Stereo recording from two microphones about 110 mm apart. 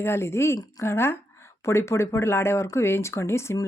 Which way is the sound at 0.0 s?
25° left (ahead or behind).